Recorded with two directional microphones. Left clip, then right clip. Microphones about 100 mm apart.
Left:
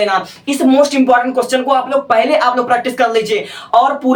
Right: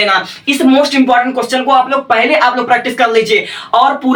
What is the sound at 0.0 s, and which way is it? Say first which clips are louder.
Speech: right 3 dB; 35° left (ahead or behind).